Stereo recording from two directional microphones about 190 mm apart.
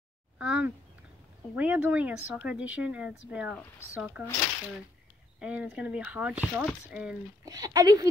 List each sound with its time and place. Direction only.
0.4 s a sound: 5° right (ahead or behind)
1.5 s speech: 10° right (ahead or behind)
5.4 s speech: 5° right (ahead or behind)
7.4 s speech: 20° right (ahead or behind)